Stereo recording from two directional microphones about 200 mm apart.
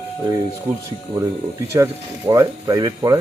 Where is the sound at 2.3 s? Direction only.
15° right (ahead or behind).